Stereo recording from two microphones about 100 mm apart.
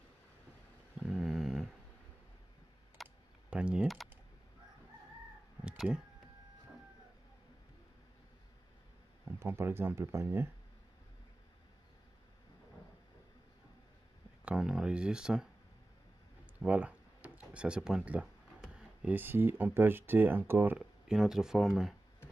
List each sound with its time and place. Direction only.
0.9 s a sound: centre (ahead or behind)
3.0 s computer keyboard: centre (ahead or behind)
3.4 s speech: 10° right (ahead or behind)
3.8 s speech: centre (ahead or behind)
5.6 s a sound: 10° right (ahead or behind)
9.2 s speech: 25° right (ahead or behind)
14.4 s speech: 10° right (ahead or behind)
16.5 s speech: 15° right (ahead or behind)
20.7 s speech: 5° right (ahead or behind)